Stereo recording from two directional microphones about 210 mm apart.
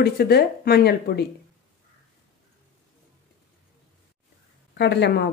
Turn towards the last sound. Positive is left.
turn(degrees=55)  # may be behind; listen again after turning